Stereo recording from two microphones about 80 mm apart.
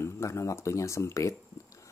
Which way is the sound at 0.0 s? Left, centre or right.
Left.